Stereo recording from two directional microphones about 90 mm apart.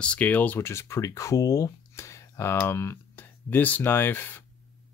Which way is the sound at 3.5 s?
20° left (ahead or behind).